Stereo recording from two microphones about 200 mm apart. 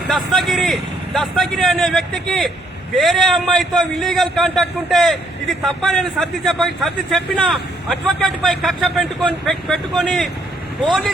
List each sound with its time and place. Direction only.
0.1 s a man's voice: centre (ahead or behind)